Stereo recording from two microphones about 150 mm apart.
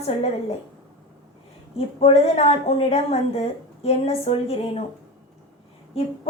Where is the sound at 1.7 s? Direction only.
45° left (ahead or behind).